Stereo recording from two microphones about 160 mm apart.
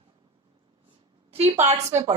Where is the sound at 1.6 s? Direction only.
40° right (ahead or behind).